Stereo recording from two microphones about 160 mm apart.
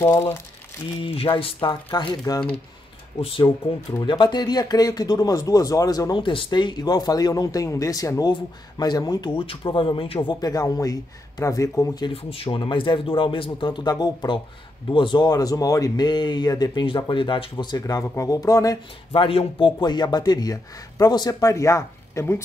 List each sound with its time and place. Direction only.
0.0 s speech: 15° left (ahead or behind)
1.0 s a man's voice: 30° left (ahead or behind)
4.0 s a man's voice: 30° left (ahead or behind)
10.4 s a man's voice: 25° left (ahead or behind)
19.2 s a man's voice: 35° left (ahead or behind); by 22.4 s 15° left (ahead or behind)